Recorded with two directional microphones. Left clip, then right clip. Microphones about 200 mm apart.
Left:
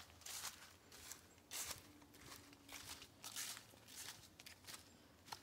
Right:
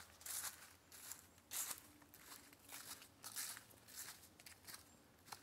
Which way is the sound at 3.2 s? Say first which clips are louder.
Left 2 dB; 15° left (ahead or behind).